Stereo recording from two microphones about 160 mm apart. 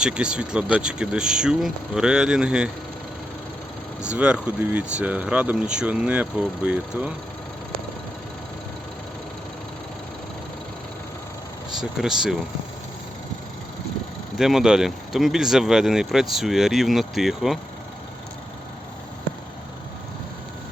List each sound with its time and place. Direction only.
0.0 s speech: 5° right (ahead or behind)
4.0 s speech: 5° right (ahead or behind)
11.8 s speech: 5° right (ahead or behind)
14.3 s speech: centre (ahead or behind)